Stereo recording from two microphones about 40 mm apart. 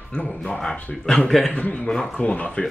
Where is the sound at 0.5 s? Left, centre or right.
Centre.